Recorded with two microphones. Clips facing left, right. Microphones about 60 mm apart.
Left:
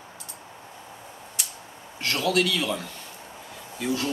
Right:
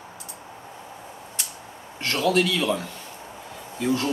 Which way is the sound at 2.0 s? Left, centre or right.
Centre.